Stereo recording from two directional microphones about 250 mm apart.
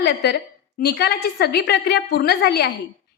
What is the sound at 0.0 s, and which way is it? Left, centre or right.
A woman's voice, left.